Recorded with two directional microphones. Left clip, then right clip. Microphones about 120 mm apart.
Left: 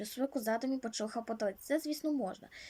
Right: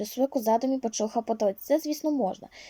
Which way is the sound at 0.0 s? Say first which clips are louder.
Right 10 dB; 25° right (ahead or behind).